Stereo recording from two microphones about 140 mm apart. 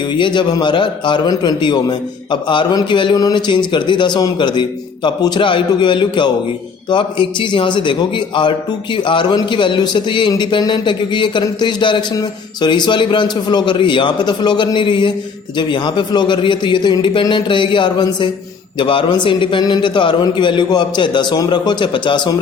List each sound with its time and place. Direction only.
0.1 s a man's voice: 35° left (ahead or behind)